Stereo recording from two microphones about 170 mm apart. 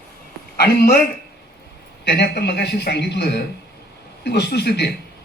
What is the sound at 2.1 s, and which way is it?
A man's voice, 75° left (ahead or behind).